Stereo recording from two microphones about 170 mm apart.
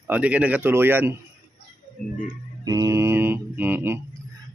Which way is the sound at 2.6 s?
20° right (ahead or behind).